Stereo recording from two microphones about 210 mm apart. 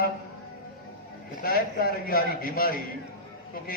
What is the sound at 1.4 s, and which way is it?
A man's voice, 45° left (ahead or behind).